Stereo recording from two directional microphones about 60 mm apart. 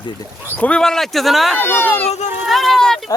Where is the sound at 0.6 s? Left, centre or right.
Centre.